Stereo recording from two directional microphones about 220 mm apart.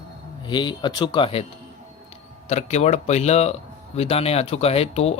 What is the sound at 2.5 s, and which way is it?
Speech, 30° left (ahead or behind).